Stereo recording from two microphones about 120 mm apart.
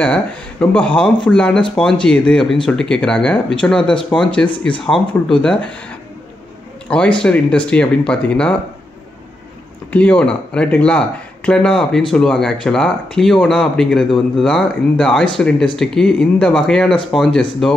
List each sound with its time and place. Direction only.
0.0 s speech: 10° left (ahead or behind)
6.9 s speech: 10° left (ahead or behind)
9.9 s speech: 10° left (ahead or behind)